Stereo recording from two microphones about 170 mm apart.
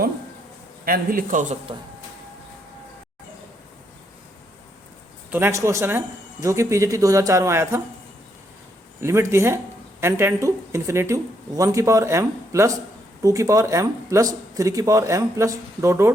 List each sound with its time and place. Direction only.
0.9 s a man's voice: 55° right (ahead or behind)
5.3 s speech: 15° right (ahead or behind)
9.0 s speech: 15° right (ahead or behind)